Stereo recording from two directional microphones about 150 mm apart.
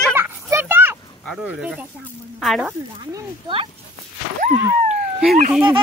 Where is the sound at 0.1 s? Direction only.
15° right (ahead or behind).